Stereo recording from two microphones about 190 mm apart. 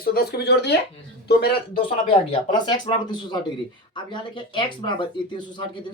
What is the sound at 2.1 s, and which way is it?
A woman's voice, 25° left (ahead or behind).